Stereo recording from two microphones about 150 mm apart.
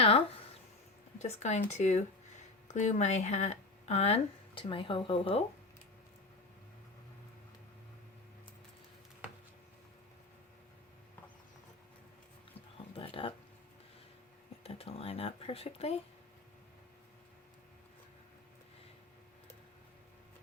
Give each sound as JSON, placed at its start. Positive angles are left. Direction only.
{"t": 1.4, "sound": "speech", "side_deg": 50}
{"t": 13.0, "sound": "a sound", "side_deg": 35}
{"t": 14.6, "sound": "speech", "side_deg": 40}